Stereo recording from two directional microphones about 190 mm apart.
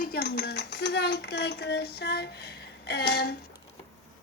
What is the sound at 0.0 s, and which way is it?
Coin, 55° left (ahead or behind).